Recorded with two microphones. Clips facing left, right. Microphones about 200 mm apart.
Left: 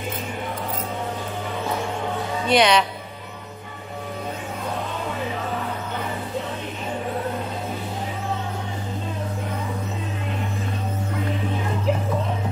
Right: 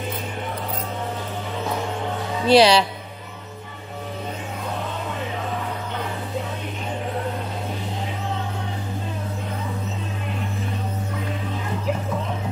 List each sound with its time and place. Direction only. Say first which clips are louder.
2.4 s speech: right 4 dB; 30° right (ahead or behind)